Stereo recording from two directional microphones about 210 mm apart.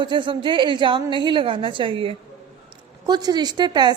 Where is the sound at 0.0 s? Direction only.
20° right (ahead or behind).